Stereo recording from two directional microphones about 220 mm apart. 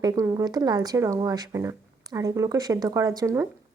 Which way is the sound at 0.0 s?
15° right (ahead or behind).